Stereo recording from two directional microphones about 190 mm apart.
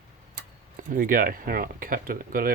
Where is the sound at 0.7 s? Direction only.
45° right (ahead or behind).